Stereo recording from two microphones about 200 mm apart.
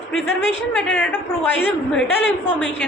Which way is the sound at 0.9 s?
10° left (ahead or behind).